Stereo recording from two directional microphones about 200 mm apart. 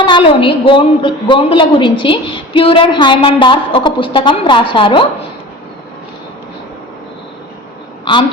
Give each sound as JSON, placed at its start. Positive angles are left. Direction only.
{"t": 0.0, "sound": "a woman's voice", "side_deg": 25}